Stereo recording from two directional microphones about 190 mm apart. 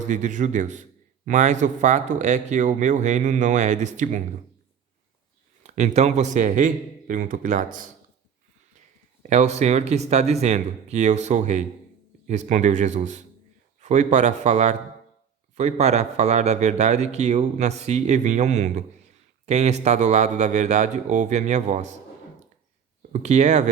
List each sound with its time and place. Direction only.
0.0 s a man's voice: 40° right (ahead or behind)
5.6 s a man's voice: 35° right (ahead or behind)
9.2 s a man's voice: 35° right (ahead or behind)
23.1 s a man's voice: 35° right (ahead or behind)